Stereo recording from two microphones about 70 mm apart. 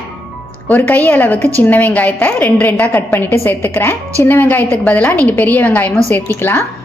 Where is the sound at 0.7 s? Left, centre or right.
Left.